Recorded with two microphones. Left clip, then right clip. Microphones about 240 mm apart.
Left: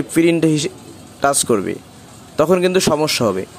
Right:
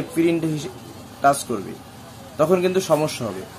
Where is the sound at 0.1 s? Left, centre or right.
Left.